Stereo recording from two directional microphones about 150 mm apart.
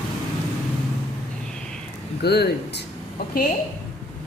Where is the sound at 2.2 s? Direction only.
90° left.